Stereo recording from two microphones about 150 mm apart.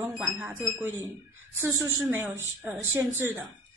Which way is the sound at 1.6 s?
20° right (ahead or behind).